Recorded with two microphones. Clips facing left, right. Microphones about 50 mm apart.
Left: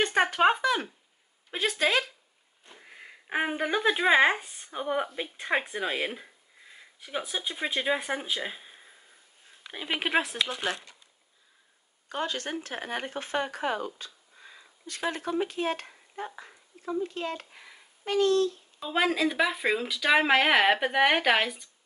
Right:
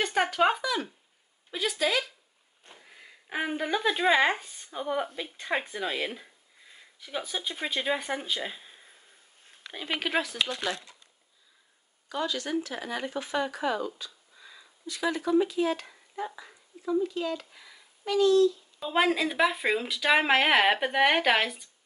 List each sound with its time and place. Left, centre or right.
0.0 s a sound: left
1.5 s speech: left
2.8 s speech: left; by 9.9 s centre
9.9 s speech: left
12.1 s speech: left
18.8 s speech: centre